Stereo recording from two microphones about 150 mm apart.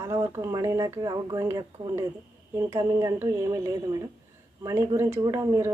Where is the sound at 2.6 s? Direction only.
20° right (ahead or behind).